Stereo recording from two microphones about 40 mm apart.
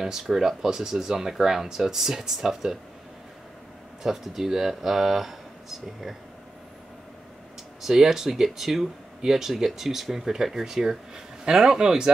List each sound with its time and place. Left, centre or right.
0.0 s speech: centre
4.0 s speech: centre
7.8 s speech: centre